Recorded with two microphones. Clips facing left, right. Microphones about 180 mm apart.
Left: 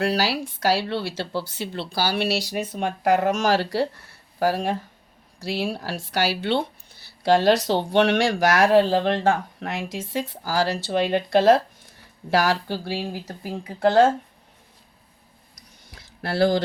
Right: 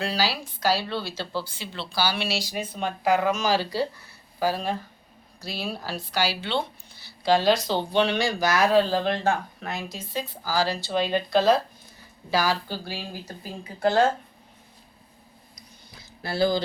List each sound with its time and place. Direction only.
0.0 s speech: 70° left (ahead or behind)
9.6 s speech: 90° left
16.2 s speech: 80° left